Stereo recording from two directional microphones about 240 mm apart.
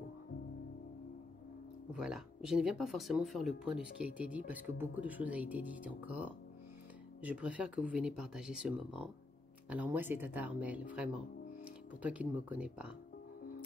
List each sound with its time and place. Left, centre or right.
1.9 s speech: centre